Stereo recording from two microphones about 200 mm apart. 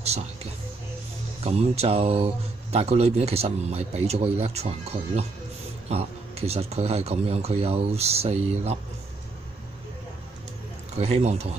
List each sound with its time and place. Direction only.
1.4 s speech: 30° right (ahead or behind)
11.0 s speech: 35° right (ahead or behind)